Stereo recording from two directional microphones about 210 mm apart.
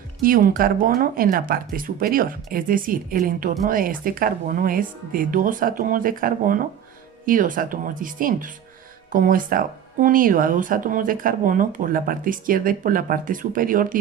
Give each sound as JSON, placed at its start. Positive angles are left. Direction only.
{"t": 0.2, "sound": "speech", "side_deg": -40}